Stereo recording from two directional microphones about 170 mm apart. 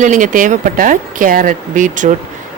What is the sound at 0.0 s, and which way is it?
Speech, 50° right (ahead or behind).